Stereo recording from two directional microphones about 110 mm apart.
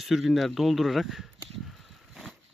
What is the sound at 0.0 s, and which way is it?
Speech, centre (ahead or behind).